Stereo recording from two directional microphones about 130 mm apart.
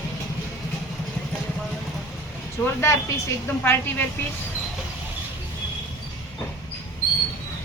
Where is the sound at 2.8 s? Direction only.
20° left (ahead or behind).